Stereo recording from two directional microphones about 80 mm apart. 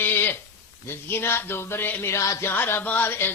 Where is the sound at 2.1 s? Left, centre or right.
Left.